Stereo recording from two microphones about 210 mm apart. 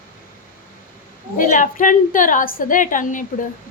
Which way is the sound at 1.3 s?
40° left (ahead or behind).